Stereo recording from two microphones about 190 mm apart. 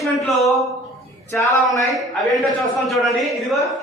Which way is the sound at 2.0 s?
Centre (ahead or behind).